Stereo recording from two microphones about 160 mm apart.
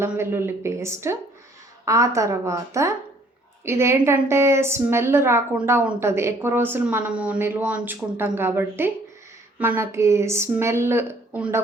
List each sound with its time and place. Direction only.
0.0 s a woman's voice: 15° right (ahead or behind)